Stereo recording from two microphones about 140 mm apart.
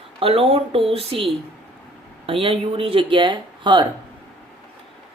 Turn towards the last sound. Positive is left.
turn(degrees=-35)  # may be behind; listen again after turning